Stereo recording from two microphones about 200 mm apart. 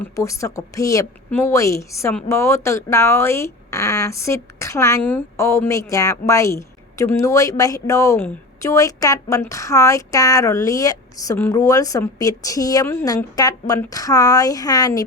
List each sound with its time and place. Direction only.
0.0 s speech: 15° left (ahead or behind)